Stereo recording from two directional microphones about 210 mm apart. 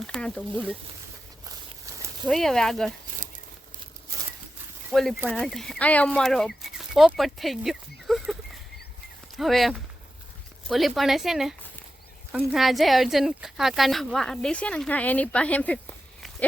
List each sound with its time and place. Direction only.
0.1 s speech: 5° left (ahead or behind)
1.9 s a sound: 15° right (ahead or behind)
2.2 s speech: centre (ahead or behind)
4.9 s speech: centre (ahead or behind)
9.4 s speech: centre (ahead or behind)